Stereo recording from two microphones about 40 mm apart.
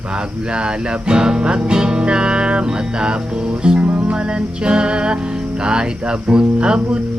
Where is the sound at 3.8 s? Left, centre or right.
Right.